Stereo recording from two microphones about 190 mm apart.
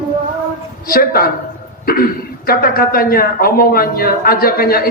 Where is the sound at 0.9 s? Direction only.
50° left (ahead or behind).